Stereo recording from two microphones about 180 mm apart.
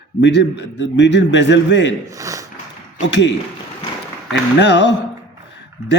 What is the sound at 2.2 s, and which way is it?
Speech, 20° right (ahead or behind).